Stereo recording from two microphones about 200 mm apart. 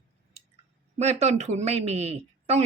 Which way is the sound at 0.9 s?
35° right (ahead or behind).